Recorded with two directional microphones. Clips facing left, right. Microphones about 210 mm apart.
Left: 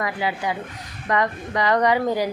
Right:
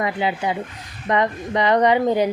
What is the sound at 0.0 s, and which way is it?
A woman's voice, 25° right (ahead or behind).